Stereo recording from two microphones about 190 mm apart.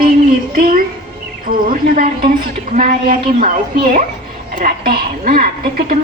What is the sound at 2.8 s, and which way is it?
Speech, 45° right (ahead or behind).